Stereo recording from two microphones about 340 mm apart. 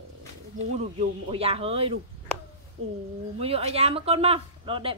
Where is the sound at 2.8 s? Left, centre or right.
Right.